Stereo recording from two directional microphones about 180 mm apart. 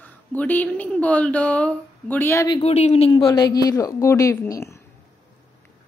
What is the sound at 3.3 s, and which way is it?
A woman's voice, 20° left (ahead or behind).